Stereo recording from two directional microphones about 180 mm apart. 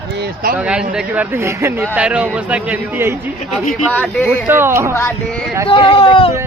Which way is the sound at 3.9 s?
10° left (ahead or behind).